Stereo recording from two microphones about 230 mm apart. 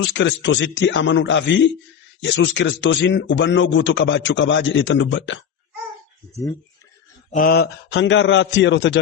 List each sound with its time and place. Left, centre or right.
0.0 s a man's voice: left
7.3 s a man's voice: left